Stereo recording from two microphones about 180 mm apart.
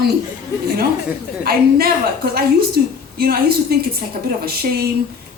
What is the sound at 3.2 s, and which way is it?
A woman's voice, 60° right (ahead or behind).